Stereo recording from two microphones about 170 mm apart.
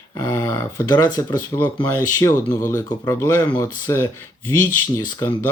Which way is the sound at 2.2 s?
15° left (ahead or behind).